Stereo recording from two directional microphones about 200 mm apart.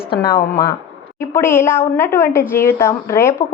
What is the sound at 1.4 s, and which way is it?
A woman's voice, 10° left (ahead or behind).